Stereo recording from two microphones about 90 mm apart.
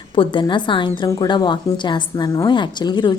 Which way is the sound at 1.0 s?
50° left (ahead or behind).